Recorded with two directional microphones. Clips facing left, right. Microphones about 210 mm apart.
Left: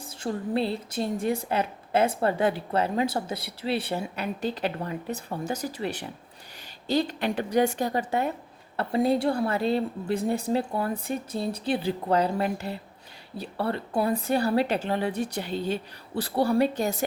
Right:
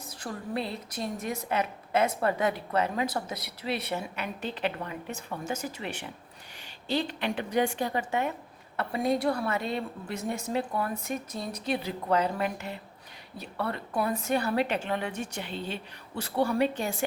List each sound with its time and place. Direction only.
0.0 s a woman's voice: 25° left (ahead or behind)